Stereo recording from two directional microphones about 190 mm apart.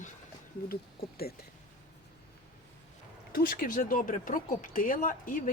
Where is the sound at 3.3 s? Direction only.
50° left (ahead or behind).